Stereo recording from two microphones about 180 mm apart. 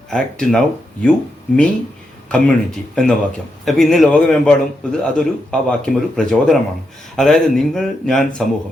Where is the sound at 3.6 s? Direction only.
Centre (ahead or behind).